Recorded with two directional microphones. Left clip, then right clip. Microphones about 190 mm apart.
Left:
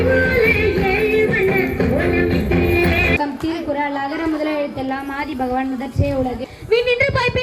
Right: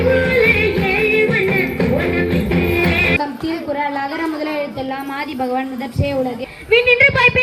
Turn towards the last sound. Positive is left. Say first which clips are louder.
# right 5 dB
turn(degrees=-20)  # may be behind; listen again after turning